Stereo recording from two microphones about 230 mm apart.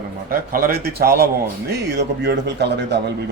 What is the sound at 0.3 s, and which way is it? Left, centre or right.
A man's voice, right.